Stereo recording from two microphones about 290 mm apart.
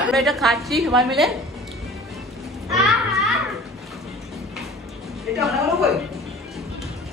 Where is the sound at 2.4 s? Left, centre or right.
Centre.